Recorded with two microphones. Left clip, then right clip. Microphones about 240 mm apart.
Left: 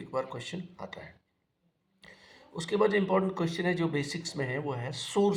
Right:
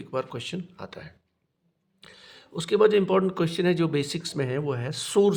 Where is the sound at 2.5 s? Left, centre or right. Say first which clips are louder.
Right 7 dB; right.